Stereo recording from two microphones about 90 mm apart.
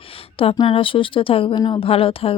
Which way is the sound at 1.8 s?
90° left.